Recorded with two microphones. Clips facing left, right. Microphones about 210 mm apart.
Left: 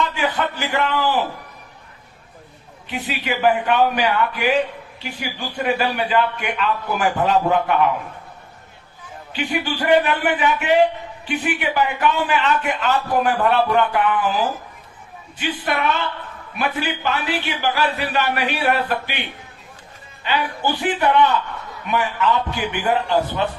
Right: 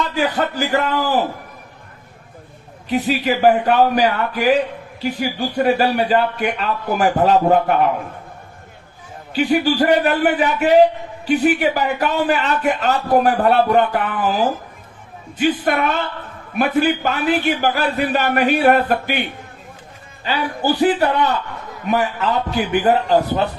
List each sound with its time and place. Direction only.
0.0 s a man's voice: 40° right (ahead or behind)
2.9 s a man's voice: 40° right (ahead or behind)
9.3 s a man's voice: 40° right (ahead or behind)
20.2 s a man's voice: 40° right (ahead or behind)